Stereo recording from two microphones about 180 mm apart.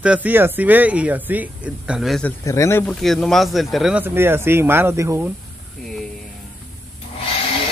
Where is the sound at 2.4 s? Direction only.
15° left (ahead or behind).